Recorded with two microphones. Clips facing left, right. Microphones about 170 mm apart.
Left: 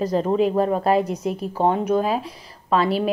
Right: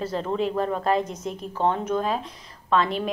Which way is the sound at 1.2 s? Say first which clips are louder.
Left 4 dB; 10° left (ahead or behind).